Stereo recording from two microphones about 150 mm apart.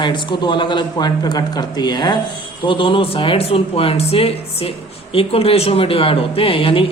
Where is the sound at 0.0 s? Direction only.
30° left (ahead or behind).